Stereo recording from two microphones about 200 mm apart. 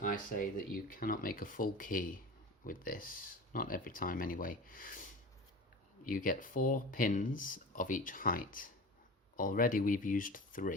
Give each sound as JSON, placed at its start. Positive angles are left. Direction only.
{"t": 0.0, "sound": "speech", "side_deg": 45}
{"t": 6.1, "sound": "speech", "side_deg": 45}